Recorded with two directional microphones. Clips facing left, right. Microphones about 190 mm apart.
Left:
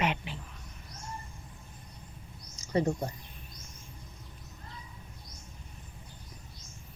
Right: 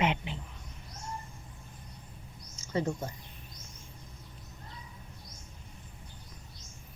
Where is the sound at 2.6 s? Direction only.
35° left (ahead or behind).